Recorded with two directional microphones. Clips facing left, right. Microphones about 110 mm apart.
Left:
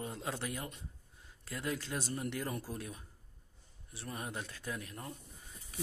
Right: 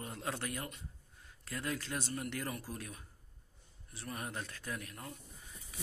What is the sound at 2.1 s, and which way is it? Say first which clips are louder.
Speech: left 2 dB; 25° left (ahead or behind).